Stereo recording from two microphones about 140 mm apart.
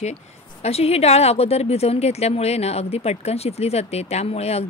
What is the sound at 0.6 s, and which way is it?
Speech, 45° left (ahead or behind).